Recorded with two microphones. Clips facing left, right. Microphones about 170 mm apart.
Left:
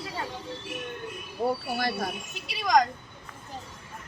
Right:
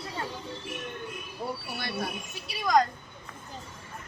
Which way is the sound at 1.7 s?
45° left (ahead or behind).